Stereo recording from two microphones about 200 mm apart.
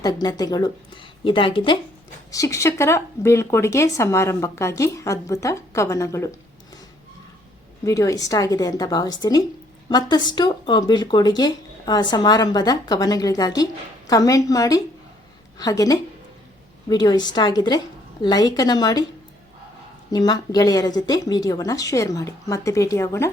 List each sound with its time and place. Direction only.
0.0 s speech: 20° left (ahead or behind)
7.9 s speech: 15° left (ahead or behind)
20.1 s speech: 20° left (ahead or behind)